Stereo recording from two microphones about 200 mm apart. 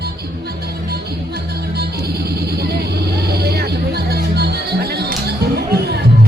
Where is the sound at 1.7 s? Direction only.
55° right (ahead or behind).